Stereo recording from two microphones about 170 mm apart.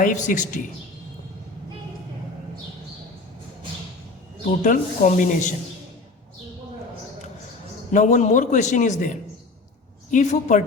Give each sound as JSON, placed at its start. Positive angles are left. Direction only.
{"t": 0.0, "sound": "a man's voice", "side_deg": 50}
{"t": 4.4, "sound": "a man's voice", "side_deg": 50}
{"t": 7.9, "sound": "a man's voice", "side_deg": 45}